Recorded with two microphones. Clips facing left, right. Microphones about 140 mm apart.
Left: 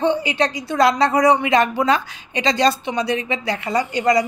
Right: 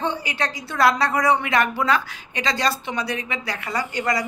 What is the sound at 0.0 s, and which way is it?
A woman's voice, 20° left (ahead or behind).